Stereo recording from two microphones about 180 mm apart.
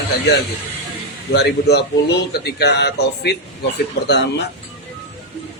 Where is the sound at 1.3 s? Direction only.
65° left (ahead or behind).